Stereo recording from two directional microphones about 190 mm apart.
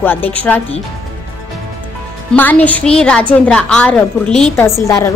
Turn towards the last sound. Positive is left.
turn(degrees=15)  # may be behind; listen again after turning